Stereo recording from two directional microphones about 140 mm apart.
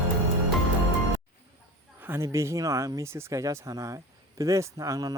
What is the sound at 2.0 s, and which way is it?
Speech, 15° right (ahead or behind).